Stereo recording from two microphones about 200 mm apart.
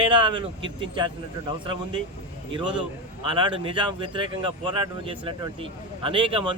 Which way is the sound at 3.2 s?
25° right (ahead or behind).